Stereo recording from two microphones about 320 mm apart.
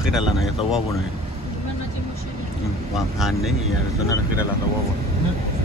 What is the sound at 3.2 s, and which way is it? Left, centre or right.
Speech, centre.